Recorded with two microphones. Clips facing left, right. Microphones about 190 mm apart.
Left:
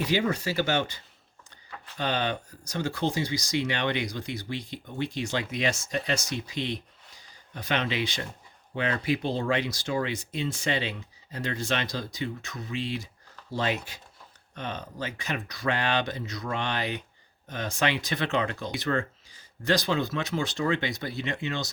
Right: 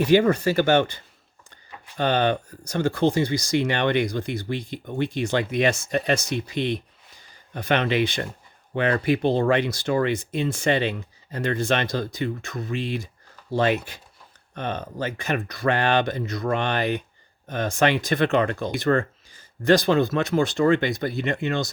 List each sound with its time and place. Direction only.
0.0 s speech: 55° right (ahead or behind)